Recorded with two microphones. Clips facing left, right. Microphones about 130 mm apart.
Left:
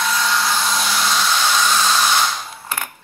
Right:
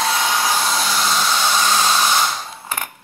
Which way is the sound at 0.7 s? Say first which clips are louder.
Even; 5° right (ahead or behind).